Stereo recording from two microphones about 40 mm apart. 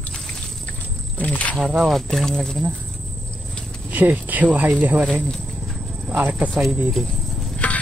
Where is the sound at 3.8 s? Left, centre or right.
Right.